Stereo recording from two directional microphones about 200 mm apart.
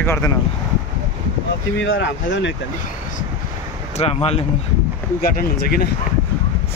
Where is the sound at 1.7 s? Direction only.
65° left (ahead or behind).